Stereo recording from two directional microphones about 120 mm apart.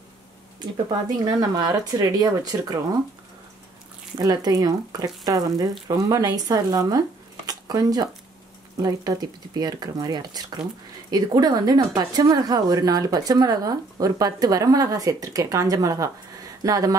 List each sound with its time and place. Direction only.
0.6 s speech: 35° right (ahead or behind)
4.2 s speech: 30° right (ahead or behind)
7.4 s a sound: 30° right (ahead or behind)
8.8 s speech: 30° right (ahead or behind)